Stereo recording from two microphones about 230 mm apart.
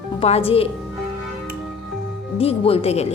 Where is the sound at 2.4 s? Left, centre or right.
Left.